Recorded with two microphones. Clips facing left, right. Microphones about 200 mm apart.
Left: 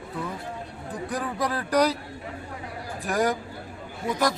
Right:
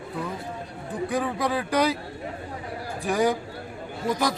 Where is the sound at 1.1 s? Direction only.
Centre (ahead or behind).